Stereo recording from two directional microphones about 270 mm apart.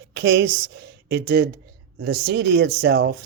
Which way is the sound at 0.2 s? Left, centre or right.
Right.